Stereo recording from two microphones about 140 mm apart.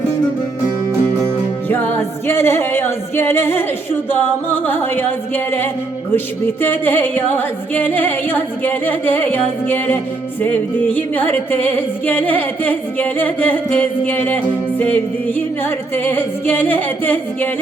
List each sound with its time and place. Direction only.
1.7 s music: 15° left (ahead or behind)